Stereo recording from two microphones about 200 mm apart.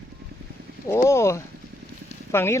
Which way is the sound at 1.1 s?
15° left (ahead or behind).